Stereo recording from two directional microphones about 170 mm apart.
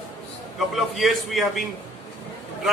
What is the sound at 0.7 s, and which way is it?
Speech, centre (ahead or behind).